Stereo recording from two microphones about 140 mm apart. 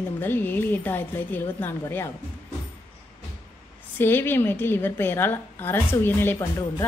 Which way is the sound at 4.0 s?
15° left (ahead or behind).